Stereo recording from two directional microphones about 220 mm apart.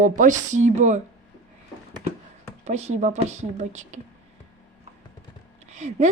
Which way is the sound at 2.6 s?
30° right (ahead or behind).